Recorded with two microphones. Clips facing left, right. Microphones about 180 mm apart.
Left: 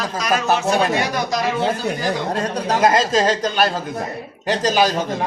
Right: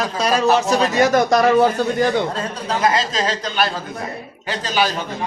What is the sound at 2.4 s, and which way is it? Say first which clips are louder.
A man's voice: left 3 dB; 45° left (ahead or behind).